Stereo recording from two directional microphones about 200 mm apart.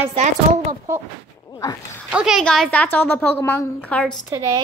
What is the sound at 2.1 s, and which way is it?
A woman's voice, 5° right (ahead or behind).